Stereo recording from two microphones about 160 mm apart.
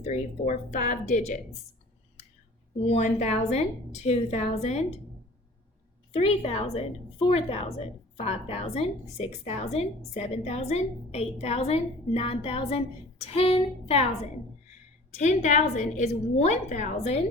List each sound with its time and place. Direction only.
0.0 s a woman's voice: 45° left (ahead or behind)
2.8 s a woman's voice: 45° left (ahead or behind)
6.1 s a woman's voice: 40° left (ahead or behind)
15.1 s a woman's voice: 45° left (ahead or behind)